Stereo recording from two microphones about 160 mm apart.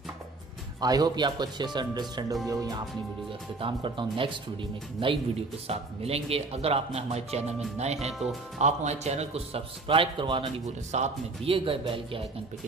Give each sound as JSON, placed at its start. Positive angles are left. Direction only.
{"t": 0.7, "sound": "speech", "side_deg": -25}
{"t": 3.5, "sound": "speech", "side_deg": -35}
{"t": 5.7, "sound": "speech", "side_deg": -40}
{"t": 8.1, "sound": "speech", "side_deg": 0}
{"t": 8.5, "sound": "speech", "side_deg": -45}